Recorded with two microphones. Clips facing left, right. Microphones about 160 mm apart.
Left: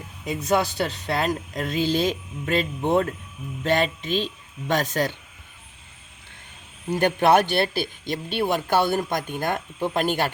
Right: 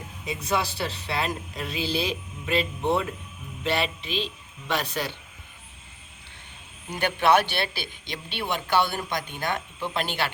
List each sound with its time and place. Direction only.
0.3 s speech: 45° left (ahead or behind)
7.0 s speech: 45° left (ahead or behind)